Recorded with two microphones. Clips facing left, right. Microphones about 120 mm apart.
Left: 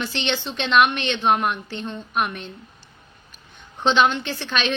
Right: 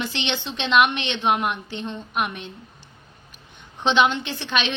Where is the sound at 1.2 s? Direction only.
40° left (ahead or behind).